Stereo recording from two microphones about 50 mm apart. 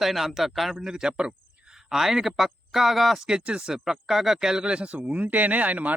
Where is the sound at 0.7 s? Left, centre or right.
Centre.